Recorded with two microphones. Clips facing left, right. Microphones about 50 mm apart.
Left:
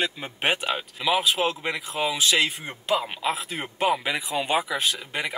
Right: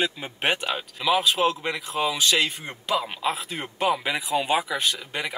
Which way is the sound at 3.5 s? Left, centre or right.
Centre.